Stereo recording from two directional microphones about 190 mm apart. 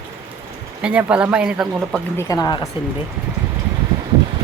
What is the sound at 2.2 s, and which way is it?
Speech, 20° left (ahead or behind).